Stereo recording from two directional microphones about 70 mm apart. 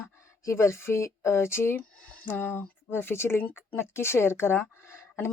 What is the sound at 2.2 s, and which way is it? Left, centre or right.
Speech, left.